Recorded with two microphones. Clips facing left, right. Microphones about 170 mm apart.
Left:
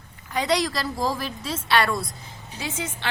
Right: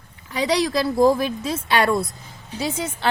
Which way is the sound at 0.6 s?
55° right (ahead or behind).